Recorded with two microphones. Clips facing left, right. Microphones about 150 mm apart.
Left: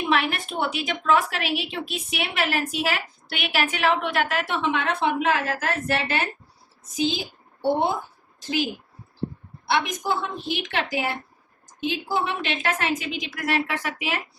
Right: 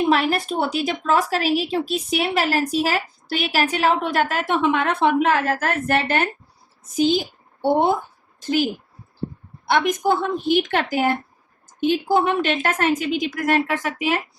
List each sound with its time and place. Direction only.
0.1 s a woman's voice: 40° right (ahead or behind)